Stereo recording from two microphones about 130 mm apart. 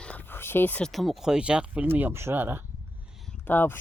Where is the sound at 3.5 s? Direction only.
15° left (ahead or behind).